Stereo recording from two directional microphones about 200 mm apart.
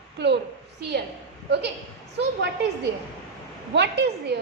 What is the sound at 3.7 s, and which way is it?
Speech, 60° right (ahead or behind).